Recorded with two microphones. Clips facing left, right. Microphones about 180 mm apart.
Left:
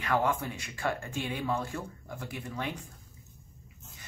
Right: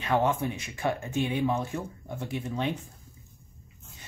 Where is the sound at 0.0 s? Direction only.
25° right (ahead or behind).